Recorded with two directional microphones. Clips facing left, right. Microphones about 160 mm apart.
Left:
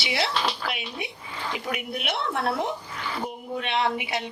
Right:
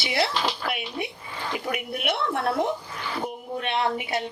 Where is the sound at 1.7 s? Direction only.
50° right (ahead or behind).